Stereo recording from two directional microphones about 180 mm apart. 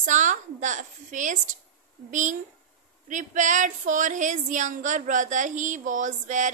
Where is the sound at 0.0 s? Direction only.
45° right (ahead or behind).